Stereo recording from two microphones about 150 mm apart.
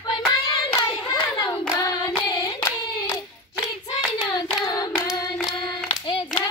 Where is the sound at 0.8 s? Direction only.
30° left (ahead or behind).